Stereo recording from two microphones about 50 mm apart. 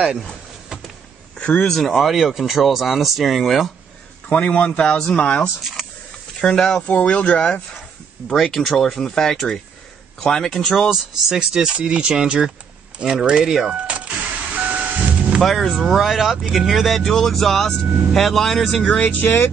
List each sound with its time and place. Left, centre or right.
1.4 s speech: left
1.7 s speech: centre
4.3 s speech: left
6.9 s speech: left
8.5 s speech: centre
10.9 s speech: centre
13.8 s rain: right
15.4 s speech: centre
18.9 s speech: left